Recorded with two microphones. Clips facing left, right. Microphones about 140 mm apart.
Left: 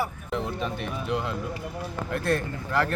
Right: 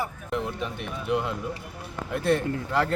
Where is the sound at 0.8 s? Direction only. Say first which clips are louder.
Right 1 dB; 15° right (ahead or behind).